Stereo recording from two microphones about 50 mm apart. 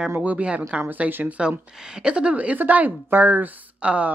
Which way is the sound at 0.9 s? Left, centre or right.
Right.